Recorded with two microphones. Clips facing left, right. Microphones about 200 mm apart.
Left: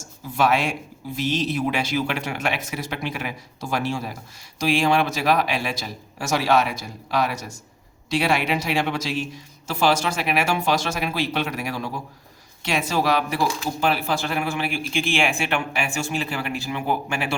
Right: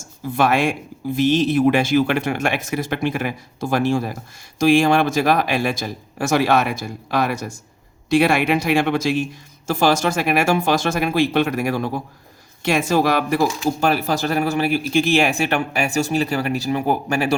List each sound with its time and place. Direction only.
0.3 s speech: 55° right (ahead or behind)